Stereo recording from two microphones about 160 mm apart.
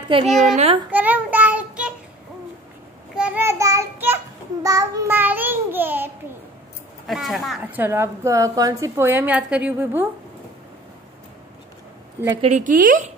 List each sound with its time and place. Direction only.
0.4 s speech: 45° right (ahead or behind)
0.9 s child singing: 10° right (ahead or behind)
3.2 s child singing: 15° right (ahead or behind)
4.6 s a woman's voice: 20° right (ahead or behind)
7.1 s speech: centre (ahead or behind)
7.6 s a woman's voice: 10° right (ahead or behind)
12.4 s speech: 45° right (ahead or behind)